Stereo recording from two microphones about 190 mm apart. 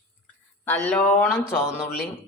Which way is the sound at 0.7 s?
5° left (ahead or behind).